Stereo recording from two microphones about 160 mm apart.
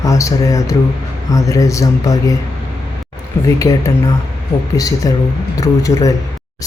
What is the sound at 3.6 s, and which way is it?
Speech, 20° left (ahead or behind).